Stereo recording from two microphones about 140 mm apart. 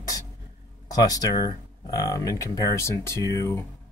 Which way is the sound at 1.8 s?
25° left (ahead or behind).